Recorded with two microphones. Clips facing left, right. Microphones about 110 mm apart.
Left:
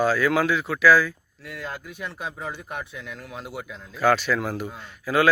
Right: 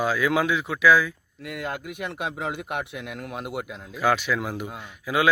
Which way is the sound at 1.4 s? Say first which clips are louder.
Right 3 dB; 60° right (ahead or behind).